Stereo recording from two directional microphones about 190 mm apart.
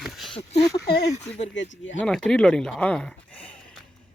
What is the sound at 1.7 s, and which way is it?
Speech, 80° left.